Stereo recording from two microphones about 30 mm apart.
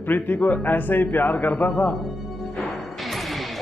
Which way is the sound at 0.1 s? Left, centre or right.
Left.